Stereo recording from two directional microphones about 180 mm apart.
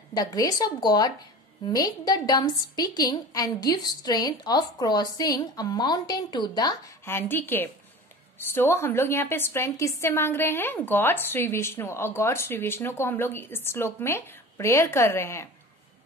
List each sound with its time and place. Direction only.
0.1 s a woman's voice: 20° left (ahead or behind)
7.1 s a woman's voice: 10° left (ahead or behind)